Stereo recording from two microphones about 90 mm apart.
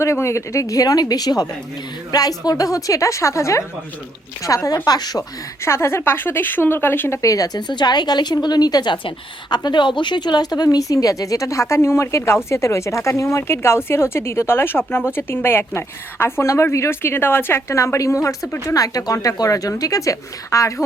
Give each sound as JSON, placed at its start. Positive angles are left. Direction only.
{"t": 0.0, "sound": "a woman's voice", "side_deg": 30}
{"t": 5.6, "sound": "speech", "side_deg": 30}
{"t": 7.2, "sound": "a woman's voice", "side_deg": 40}